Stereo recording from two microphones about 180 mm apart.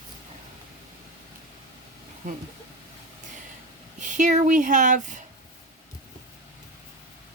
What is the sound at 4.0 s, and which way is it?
Speech, 45° right (ahead or behind).